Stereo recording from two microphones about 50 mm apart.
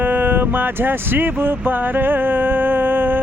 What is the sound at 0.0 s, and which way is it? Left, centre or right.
Speech, right.